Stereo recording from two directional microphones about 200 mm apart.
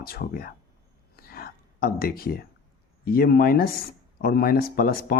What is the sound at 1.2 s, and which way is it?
Whispering, 50° left (ahead or behind).